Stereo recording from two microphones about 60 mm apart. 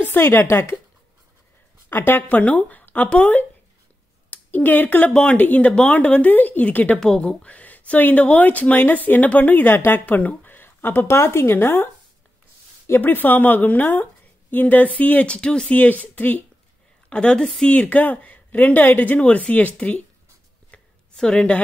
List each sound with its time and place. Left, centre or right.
0.0 s a woman's voice: left
1.9 s speech: left
7.0 s speech: centre
7.4 s speech: left
11.1 s speech: left
13.0 s speech: left; by 15.7 s centre
15.7 s speech: left
17.1 s speech: centre
20.7 s a sound: centre